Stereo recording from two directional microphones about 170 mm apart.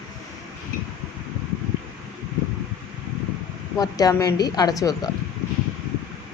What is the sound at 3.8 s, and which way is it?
A woman's voice, 20° left (ahead or behind).